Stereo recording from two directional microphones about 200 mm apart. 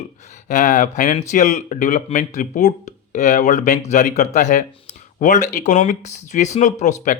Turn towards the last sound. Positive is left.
turn(degrees=35)  # may be behind; listen again after turning